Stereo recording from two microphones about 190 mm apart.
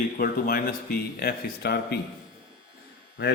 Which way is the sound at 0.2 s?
50° left (ahead or behind).